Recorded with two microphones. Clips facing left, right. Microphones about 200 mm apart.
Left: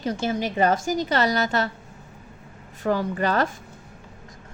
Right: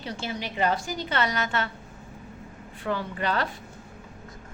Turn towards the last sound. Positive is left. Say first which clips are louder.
# left 5 dB
turn(degrees=45)  # may be behind; listen again after turning